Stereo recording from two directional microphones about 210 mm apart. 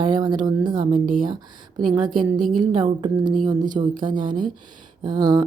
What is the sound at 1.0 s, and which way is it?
Speech, 40° right (ahead or behind).